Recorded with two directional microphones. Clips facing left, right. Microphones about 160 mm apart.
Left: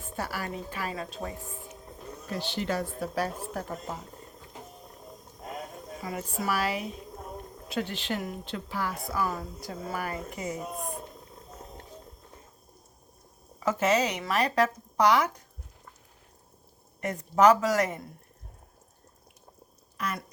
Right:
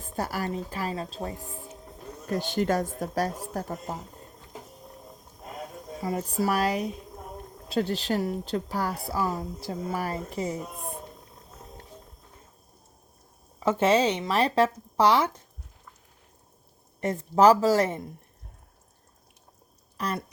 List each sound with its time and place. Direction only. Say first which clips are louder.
0.0 s a woman's voice: right 4 dB; 40° right (ahead or behind)
2.2 s speech: right 6 dB; 45° right (ahead or behind)
6.0 s a woman's voice: right 7 dB; 35° right (ahead or behind)
13.7 s speech: right 4 dB; 30° right (ahead or behind)
17.0 s speech: right 2 dB; 30° right (ahead or behind)
20.0 s a woman's voice: right 3 dB; 35° right (ahead or behind)